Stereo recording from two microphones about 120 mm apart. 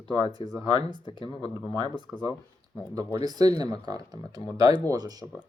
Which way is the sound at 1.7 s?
50° left (ahead or behind).